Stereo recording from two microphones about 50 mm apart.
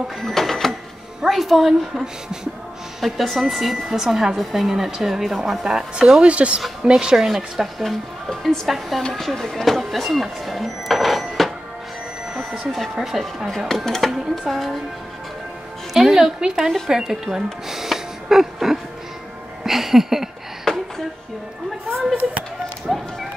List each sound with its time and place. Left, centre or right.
0.2 s cash register: centre
1.2 s a woman's voice: centre
6.2 s a woman's voice: right; by 14.8 s centre
15.9 s a woman's voice: centre
16.9 s music: centre
19.6 s a sound: centre
20.7 s a sound: centre
22.9 s music: centre